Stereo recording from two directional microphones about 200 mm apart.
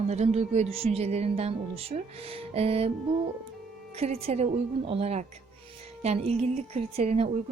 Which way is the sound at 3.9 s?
30° right (ahead or behind).